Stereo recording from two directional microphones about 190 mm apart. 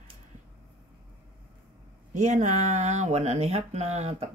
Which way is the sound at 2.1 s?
40° right (ahead or behind).